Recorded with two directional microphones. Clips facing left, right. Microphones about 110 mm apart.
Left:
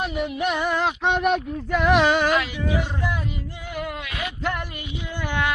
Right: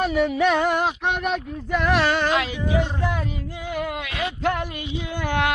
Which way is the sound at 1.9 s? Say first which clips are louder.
Left 3 dB; 15° left (ahead or behind).